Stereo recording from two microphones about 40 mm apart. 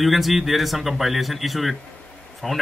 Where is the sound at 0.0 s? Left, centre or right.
Centre.